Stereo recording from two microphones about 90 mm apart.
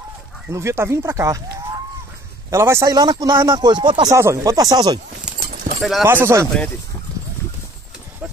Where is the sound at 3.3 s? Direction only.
55° right (ahead or behind).